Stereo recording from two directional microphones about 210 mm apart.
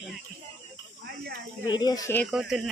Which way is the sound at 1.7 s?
20° left (ahead or behind).